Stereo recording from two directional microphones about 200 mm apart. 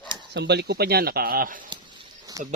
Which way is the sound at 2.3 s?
20° right (ahead or behind).